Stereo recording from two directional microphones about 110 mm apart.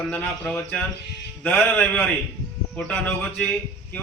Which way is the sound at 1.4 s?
15° left (ahead or behind).